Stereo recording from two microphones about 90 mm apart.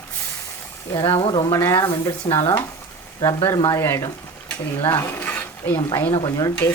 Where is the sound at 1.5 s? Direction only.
25° left (ahead or behind).